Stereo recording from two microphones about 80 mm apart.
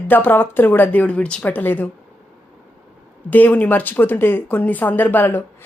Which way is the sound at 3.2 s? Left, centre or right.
Left.